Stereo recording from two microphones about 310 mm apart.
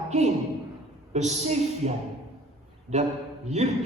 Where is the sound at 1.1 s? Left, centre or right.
Right.